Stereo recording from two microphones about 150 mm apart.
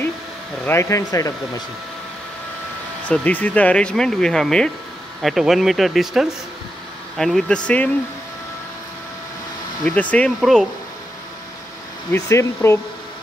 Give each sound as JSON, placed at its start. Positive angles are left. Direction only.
{"t": 0.7, "sound": "speech", "side_deg": 20}
{"t": 3.1, "sound": "speech", "side_deg": 10}
{"t": 9.8, "sound": "speech", "side_deg": 10}
{"t": 12.1, "sound": "speech", "side_deg": 20}